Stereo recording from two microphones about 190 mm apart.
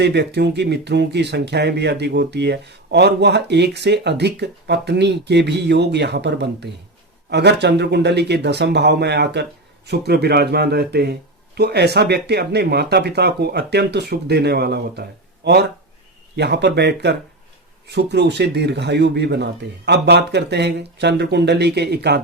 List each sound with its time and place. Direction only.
0.0 s speech: 60° right (ahead or behind)